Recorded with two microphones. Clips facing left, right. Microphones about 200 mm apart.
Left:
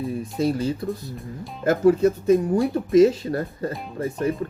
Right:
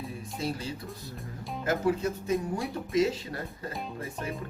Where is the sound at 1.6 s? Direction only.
50° left (ahead or behind).